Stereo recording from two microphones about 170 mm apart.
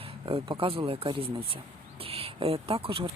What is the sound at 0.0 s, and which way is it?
Speech, 35° right (ahead or behind).